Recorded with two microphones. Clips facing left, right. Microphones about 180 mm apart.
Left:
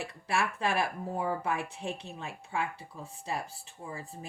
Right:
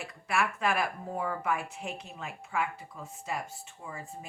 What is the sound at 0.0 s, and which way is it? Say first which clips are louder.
Speech: even; 30° left (ahead or behind).